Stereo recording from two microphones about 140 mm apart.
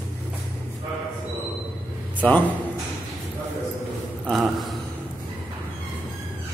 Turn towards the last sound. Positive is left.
turn(degrees=0)  # may be behind; listen again after turning